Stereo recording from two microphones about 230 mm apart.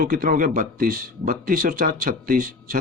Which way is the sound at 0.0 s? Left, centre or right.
Right.